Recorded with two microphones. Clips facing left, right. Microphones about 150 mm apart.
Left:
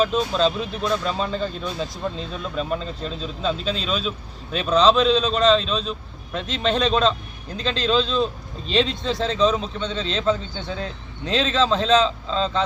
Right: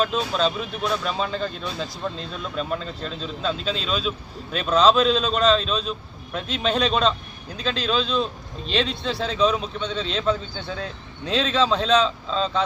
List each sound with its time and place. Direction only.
0.0 s speech: centre (ahead or behind)